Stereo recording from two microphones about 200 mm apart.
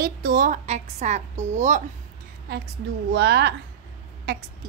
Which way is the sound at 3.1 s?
60° right (ahead or behind).